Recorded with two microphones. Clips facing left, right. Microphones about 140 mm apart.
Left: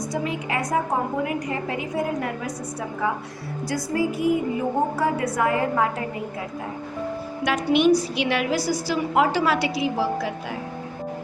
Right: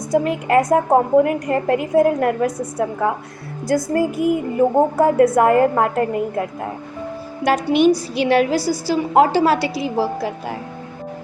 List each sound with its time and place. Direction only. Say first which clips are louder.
0.1 s a woman's voice: right 13 dB; 55° right (ahead or behind)
3.7 s a woman's voice: right 7 dB; 50° right (ahead or behind)
7.4 s a woman's voice: right 4 dB; 35° right (ahead or behind)